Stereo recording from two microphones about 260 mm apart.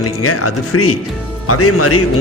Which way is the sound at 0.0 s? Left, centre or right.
Left.